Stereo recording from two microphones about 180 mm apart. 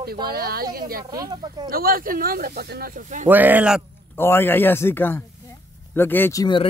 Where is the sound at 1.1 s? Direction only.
20° right (ahead or behind).